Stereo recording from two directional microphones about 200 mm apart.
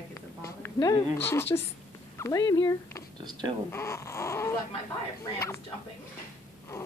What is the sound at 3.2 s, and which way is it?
Speech, 20° right (ahead or behind).